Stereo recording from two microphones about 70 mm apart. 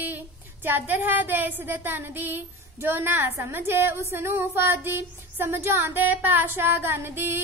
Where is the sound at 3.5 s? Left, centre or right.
Right.